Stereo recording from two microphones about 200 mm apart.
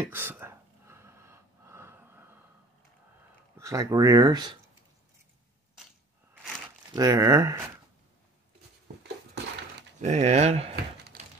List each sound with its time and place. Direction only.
0.0 s a sound: 10° right (ahead or behind)
3.5 s speech: 15° right (ahead or behind)
7.0 s speech: 15° right (ahead or behind)
10.0 s speech: 35° right (ahead or behind)